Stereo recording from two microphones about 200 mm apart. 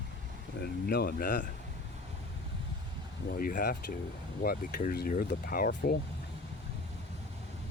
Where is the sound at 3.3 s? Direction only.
45° left (ahead or behind).